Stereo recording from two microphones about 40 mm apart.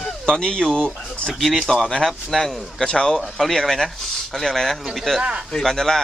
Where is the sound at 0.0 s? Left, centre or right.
Centre.